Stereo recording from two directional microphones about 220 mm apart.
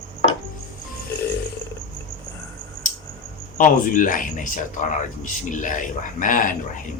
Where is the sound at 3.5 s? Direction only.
35° left (ahead or behind).